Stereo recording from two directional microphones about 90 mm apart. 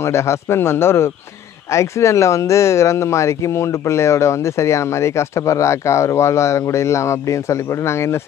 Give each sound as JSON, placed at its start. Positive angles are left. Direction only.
{"t": 0.0, "sound": "speech", "side_deg": 30}